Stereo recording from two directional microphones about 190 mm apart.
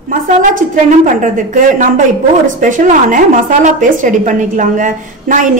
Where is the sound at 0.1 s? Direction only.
45° right (ahead or behind).